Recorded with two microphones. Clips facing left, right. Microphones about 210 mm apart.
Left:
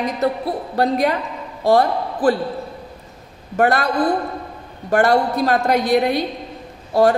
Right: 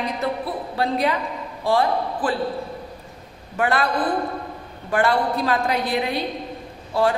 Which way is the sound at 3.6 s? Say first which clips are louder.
Left 4 dB; 45° left (ahead or behind).